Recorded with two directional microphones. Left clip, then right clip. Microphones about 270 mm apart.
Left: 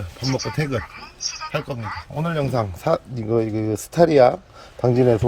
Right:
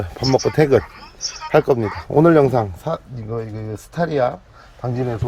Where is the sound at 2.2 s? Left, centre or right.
Centre.